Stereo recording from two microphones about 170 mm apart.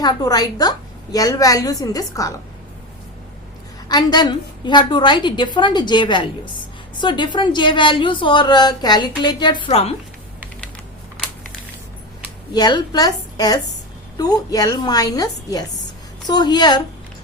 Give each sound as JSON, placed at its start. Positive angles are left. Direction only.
{"t": 0.0, "sound": "a woman's voice", "side_deg": 20}
{"t": 3.8, "sound": "a woman's voice", "side_deg": 25}
{"t": 12.5, "sound": "a woman's voice", "side_deg": 25}